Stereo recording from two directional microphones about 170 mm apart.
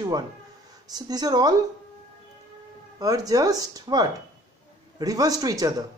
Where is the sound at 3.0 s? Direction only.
20° right (ahead or behind).